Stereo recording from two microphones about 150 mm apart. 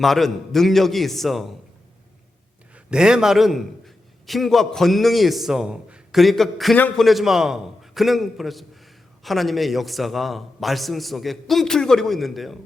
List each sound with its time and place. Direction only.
0.0 s a man's voice: centre (ahead or behind)
2.7 s a man's voice: 5° right (ahead or behind); by 7.0 s 10° left (ahead or behind)
7.0 s a man's voice: centre (ahead or behind)